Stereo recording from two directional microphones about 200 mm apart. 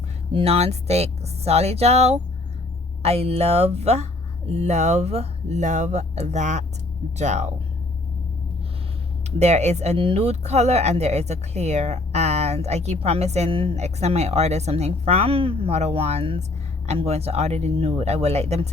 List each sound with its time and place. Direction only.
0.3 s speech: 30° right (ahead or behind)
9.4 s speech: 35° right (ahead or behind)